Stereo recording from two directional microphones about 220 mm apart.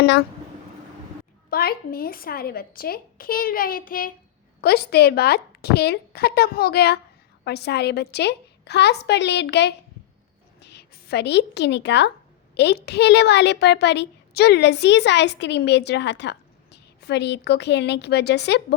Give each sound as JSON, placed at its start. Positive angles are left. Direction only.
{"t": 1.5, "sound": "a woman's voice", "side_deg": 45}